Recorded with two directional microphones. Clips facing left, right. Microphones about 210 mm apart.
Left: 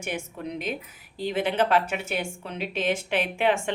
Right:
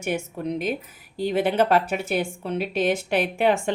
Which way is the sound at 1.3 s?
40° right (ahead or behind).